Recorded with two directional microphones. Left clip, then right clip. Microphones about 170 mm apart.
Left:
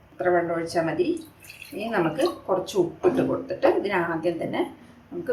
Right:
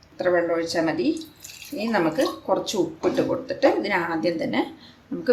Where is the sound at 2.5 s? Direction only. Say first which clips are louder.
Right 1 dB; 30° right (ahead or behind).